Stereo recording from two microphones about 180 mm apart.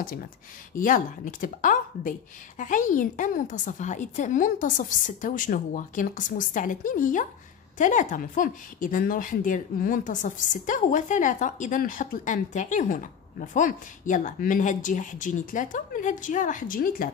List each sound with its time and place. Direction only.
0.7 s speech: 50° left (ahead or behind)